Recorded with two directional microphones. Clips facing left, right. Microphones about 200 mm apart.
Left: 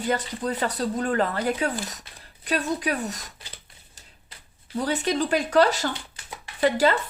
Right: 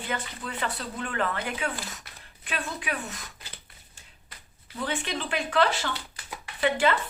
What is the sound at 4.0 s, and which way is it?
Shuffling cards, 40° left (ahead or behind).